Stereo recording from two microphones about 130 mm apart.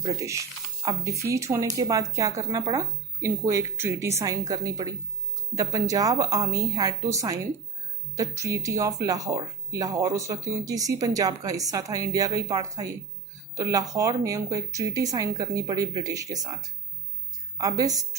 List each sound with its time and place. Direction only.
0.0 s speech: 25° right (ahead or behind)
13.6 s speech: 25° right (ahead or behind)